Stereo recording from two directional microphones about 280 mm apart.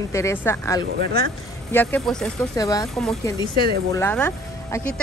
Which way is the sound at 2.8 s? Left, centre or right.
Centre.